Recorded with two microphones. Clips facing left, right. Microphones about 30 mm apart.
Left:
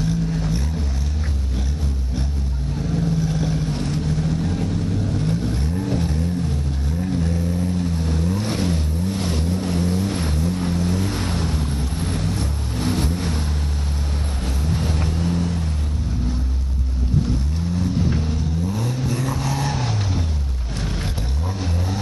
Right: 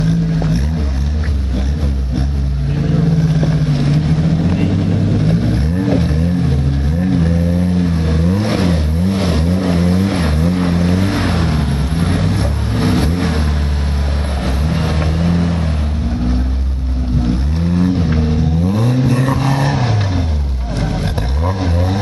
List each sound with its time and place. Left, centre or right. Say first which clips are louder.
0.0 s a sound: right 7 dB; right
2.8 s vehicle: right 7 dB; right
3.2 s vehicle: right 7 dB; right
14.4 s vehicle: right 7 dB; right
17.7 s vehicle: right 7 dB; right